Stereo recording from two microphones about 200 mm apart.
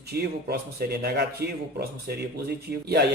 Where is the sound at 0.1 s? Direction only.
50° right (ahead or behind).